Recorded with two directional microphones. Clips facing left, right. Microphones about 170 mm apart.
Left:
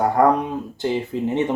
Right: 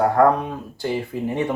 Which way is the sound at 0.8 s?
20° left (ahead or behind).